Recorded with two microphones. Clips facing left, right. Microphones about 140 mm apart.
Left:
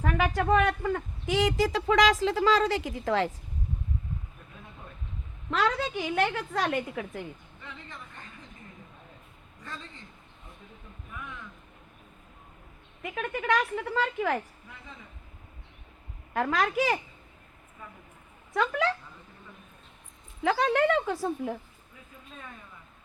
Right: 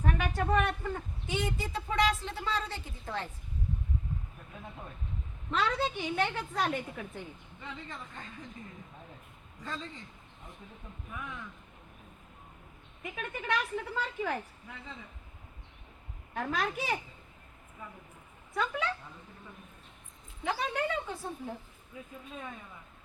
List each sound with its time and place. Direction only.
0.0 s speech: 90° left
5.5 s speech: 90° left
13.5 s speech: 90° left
16.3 s speech: 90° left
18.5 s speech: 90° left
20.4 s speech: 90° left